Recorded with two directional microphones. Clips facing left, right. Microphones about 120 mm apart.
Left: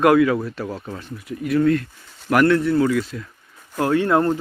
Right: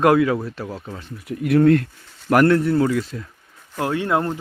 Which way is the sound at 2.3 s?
40° right (ahead or behind).